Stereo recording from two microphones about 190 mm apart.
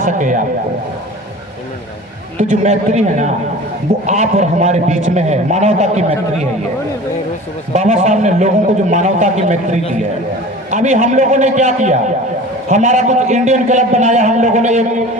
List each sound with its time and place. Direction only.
0.0 s a man's voice: 40° right (ahead or behind)
2.4 s a man's voice: 40° right (ahead or behind)
7.7 s a man's voice: 40° right (ahead or behind)